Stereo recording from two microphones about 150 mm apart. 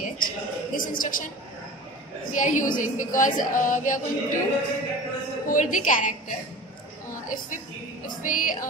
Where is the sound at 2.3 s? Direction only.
60° left (ahead or behind).